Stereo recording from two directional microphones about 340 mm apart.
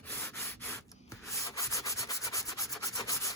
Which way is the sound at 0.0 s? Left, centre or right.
Centre.